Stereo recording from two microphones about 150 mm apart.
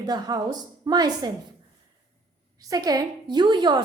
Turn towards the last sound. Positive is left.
turn(degrees=-30)  # may be behind; listen again after turning